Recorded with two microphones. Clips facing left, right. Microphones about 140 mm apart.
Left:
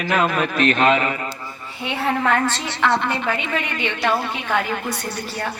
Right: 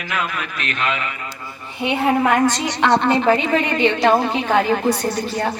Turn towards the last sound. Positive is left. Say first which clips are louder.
# right 8 dB
turn(degrees=-40)  # may be behind; listen again after turning